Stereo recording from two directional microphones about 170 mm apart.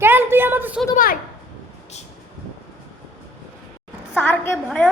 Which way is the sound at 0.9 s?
55° left (ahead or behind).